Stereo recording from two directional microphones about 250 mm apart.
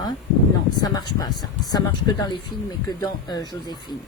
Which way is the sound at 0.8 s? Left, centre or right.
Centre.